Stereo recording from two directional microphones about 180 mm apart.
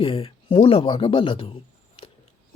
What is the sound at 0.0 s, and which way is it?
Speech, 30° left (ahead or behind).